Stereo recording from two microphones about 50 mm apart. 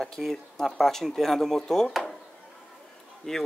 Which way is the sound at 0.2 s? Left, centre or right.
Centre.